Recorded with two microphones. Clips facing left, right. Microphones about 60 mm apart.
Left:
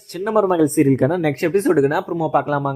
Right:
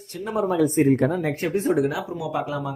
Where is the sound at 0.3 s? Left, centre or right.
Left.